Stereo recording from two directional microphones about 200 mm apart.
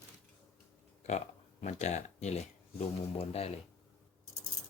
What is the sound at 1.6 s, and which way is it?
Speech, 35° left (ahead or behind).